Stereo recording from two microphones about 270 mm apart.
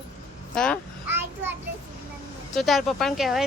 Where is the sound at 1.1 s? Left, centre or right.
Centre.